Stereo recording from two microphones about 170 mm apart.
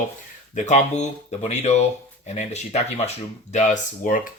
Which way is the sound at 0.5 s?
45° left (ahead or behind).